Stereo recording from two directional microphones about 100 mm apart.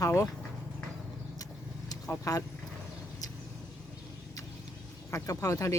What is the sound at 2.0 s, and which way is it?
Speech, 30° left (ahead or behind).